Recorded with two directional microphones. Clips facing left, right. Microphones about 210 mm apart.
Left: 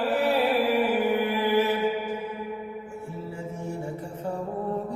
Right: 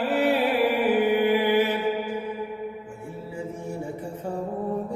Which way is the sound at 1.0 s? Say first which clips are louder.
Right 3 dB; 20° right (ahead or behind).